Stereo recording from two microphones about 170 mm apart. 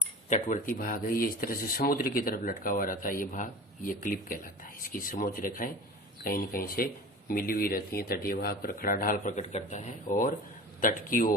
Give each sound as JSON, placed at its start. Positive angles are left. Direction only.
{"t": 0.3, "sound": "a man's voice", "side_deg": 45}